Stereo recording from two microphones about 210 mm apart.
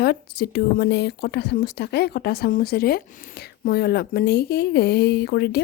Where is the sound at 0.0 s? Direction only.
50° left (ahead or behind).